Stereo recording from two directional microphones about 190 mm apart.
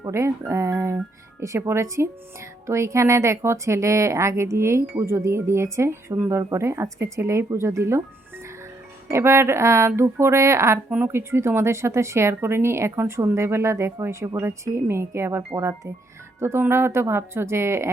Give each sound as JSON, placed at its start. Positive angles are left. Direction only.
{"t": 0.0, "sound": "speech", "side_deg": -15}
{"t": 9.0, "sound": "speech", "side_deg": -15}